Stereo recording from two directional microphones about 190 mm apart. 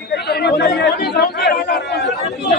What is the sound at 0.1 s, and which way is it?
Chatter, 60° left (ahead or behind).